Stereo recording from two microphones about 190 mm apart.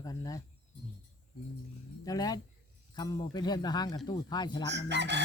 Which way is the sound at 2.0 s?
20° left (ahead or behind).